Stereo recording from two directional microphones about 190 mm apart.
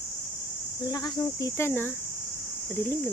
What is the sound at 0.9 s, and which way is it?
Speech, 20° left (ahead or behind).